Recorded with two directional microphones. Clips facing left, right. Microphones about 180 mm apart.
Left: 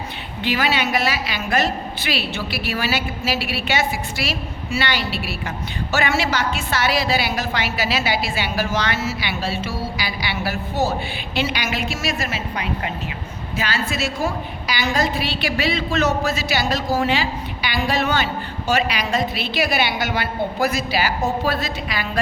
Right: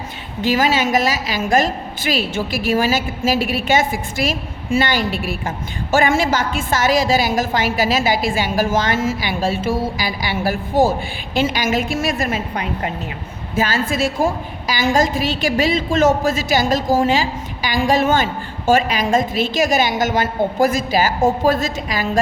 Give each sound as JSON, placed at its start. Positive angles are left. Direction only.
{"t": 0.4, "sound": "a woman's voice", "side_deg": -45}